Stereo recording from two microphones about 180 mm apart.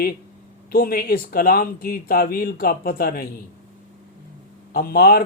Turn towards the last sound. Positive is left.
turn(degrees=55)  # may be behind; listen again after turning